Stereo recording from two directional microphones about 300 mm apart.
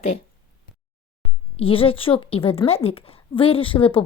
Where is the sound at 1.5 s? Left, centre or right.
Centre.